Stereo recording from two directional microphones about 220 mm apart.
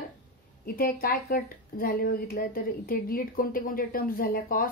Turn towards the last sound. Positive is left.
turn(degrees=40)  # may be behind; listen again after turning